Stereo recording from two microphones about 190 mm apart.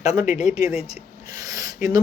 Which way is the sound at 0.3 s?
40° left (ahead or behind).